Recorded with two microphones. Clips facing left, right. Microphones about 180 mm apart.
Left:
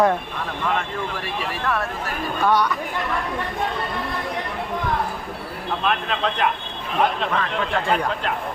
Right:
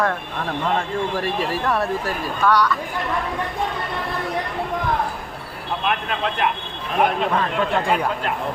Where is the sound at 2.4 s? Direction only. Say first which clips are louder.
Right 1 dB; 20° left (ahead or behind).